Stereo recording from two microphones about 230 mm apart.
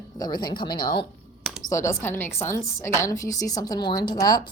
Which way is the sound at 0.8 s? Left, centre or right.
Left.